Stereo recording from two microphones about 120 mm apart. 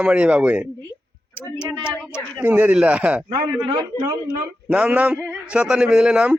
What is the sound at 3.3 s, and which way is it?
Speech, 30° right (ahead or behind).